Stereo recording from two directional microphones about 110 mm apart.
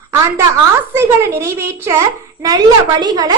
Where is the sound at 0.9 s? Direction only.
25° right (ahead or behind).